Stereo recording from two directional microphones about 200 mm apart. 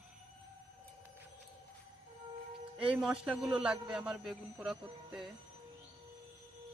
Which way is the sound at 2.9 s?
Centre (ahead or behind).